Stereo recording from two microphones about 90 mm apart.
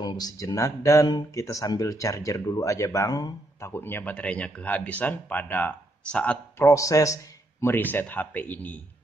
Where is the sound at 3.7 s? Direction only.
25° left (ahead or behind).